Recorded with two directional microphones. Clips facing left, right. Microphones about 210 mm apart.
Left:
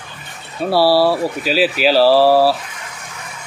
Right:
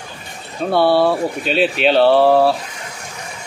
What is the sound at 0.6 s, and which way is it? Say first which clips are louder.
Speech: left 1 dB; 5° left (ahead or behind).